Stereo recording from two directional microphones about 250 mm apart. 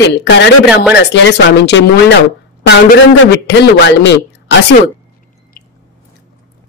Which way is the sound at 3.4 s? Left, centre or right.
Left.